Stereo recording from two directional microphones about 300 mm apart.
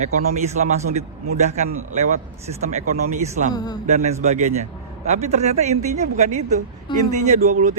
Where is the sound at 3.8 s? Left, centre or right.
Right.